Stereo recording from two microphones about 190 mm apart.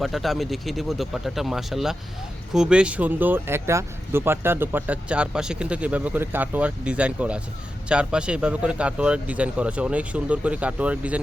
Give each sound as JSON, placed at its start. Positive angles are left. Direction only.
{"t": 0.0, "sound": "speech", "side_deg": 0}